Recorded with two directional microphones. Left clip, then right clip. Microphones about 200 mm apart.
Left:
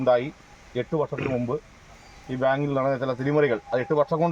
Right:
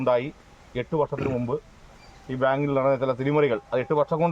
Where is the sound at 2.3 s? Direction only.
5° right (ahead or behind).